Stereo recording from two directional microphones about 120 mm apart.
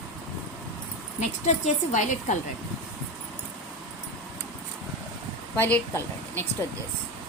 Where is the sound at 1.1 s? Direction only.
85° left.